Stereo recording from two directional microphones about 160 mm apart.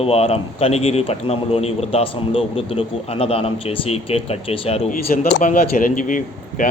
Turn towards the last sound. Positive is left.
turn(degrees=55)  # may be behind; listen again after turning